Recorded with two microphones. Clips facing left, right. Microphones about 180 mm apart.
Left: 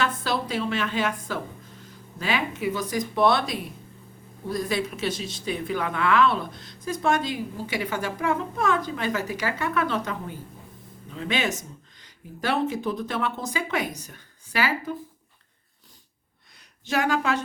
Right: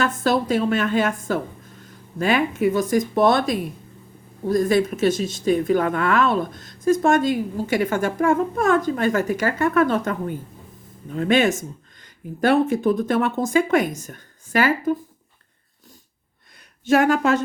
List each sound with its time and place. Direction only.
0.0 s speech: 45° right (ahead or behind)
16.9 s speech: 50° right (ahead or behind)